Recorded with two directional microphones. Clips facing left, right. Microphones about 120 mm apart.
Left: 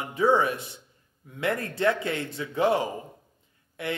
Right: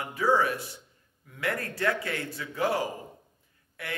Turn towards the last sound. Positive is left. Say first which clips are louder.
# left 7 dB
turn(degrees=25)  # may be behind; listen again after turning